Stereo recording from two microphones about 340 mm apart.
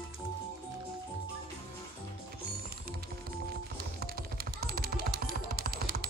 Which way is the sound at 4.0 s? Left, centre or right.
Right.